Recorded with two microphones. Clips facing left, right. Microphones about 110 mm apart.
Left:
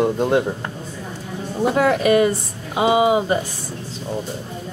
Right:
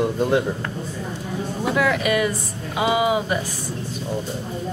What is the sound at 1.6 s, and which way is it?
A woman's voice, 35° left (ahead or behind).